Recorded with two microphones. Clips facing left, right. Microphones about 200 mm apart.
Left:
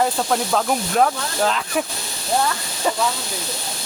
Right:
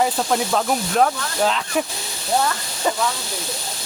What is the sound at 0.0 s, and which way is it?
Speech, 5° right (ahead or behind).